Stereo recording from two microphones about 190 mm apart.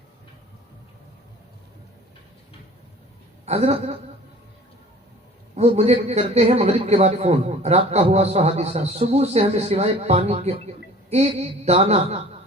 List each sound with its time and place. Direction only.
3.4 s a woman's voice: 35° right (ahead or behind)
5.5 s a man's voice: 35° right (ahead or behind)